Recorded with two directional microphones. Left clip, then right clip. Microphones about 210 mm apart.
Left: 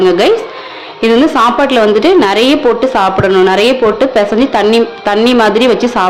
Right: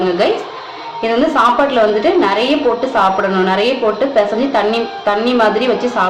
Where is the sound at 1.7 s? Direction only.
50° left (ahead or behind).